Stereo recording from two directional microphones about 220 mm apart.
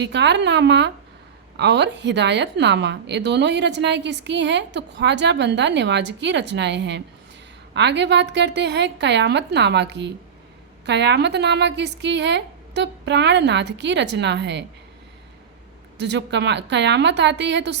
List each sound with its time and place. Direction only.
0.0 s a woman's voice: 50° right (ahead or behind)
16.0 s a woman's voice: 50° right (ahead or behind)